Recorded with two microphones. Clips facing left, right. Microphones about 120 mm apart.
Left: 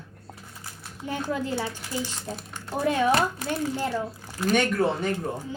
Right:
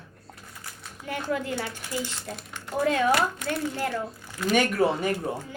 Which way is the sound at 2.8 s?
20° left (ahead or behind).